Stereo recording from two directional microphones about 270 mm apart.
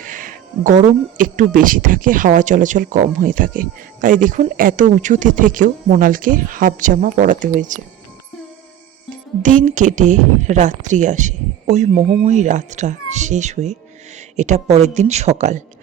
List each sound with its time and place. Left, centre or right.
0.0 s speech: right
9.4 s speech: right